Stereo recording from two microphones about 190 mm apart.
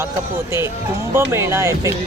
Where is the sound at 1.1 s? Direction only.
15° right (ahead or behind).